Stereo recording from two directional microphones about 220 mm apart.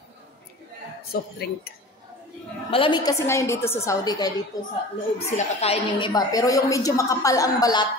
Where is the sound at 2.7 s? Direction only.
20° left (ahead or behind).